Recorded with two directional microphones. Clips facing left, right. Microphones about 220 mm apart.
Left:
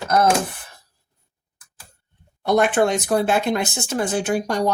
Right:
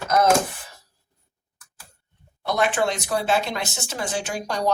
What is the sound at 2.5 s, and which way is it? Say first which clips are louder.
Speech: left 5 dB; 55° left (ahead or behind).